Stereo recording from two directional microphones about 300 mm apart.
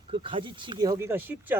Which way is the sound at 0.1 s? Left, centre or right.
Centre.